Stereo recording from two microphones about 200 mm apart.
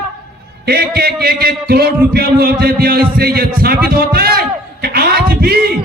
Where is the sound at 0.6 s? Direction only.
50° right (ahead or behind).